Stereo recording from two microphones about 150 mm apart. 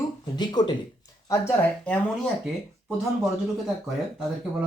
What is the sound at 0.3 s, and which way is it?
Speech, 30° left (ahead or behind).